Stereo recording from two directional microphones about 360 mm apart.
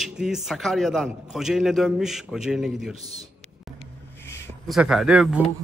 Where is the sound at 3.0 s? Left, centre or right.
Centre.